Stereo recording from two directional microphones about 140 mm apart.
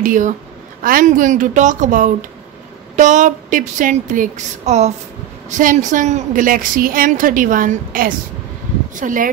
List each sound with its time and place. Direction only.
0.0 s speech: 65° right (ahead or behind)
0.8 s speech: 80° right; by 4.9 s 50° right (ahead or behind)
5.6 s a woman's voice: 70° right (ahead or behind)